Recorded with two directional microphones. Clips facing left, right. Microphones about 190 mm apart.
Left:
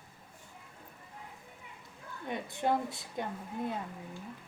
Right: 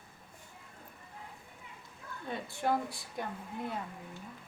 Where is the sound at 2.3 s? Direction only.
20° left (ahead or behind).